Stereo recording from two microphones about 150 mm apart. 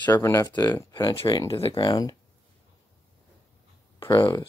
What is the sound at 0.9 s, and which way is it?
Speech, 30° left (ahead or behind).